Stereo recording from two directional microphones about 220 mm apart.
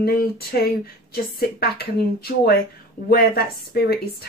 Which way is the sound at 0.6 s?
45° left (ahead or behind).